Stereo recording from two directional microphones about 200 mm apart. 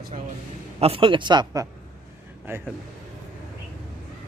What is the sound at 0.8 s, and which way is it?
A man's voice, 25° right (ahead or behind).